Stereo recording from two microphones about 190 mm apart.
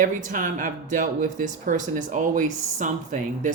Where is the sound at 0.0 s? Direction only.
45° right (ahead or behind).